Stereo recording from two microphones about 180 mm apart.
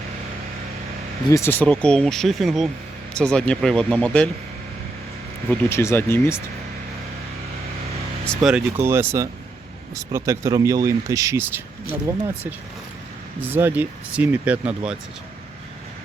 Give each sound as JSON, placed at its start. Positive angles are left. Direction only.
{"t": 1.3, "sound": "speech", "side_deg": 10}
{"t": 5.5, "sound": "speech", "side_deg": 15}
{"t": 8.3, "sound": "speech", "side_deg": 0}
{"t": 13.4, "sound": "speech", "side_deg": -10}